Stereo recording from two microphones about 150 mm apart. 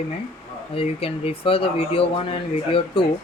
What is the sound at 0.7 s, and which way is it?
Speech, 40° left (ahead or behind).